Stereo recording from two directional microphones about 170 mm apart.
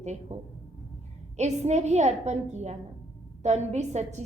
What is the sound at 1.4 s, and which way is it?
A woman's voice, 40° right (ahead or behind).